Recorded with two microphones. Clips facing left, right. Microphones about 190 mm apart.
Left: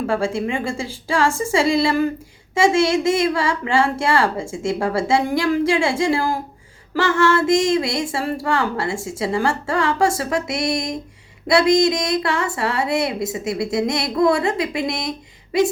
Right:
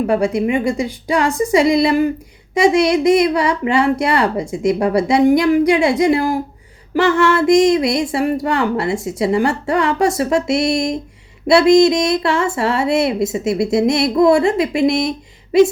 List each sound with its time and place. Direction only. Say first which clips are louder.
0.1 s a child's voice: right 5 dB; 20° right (ahead or behind)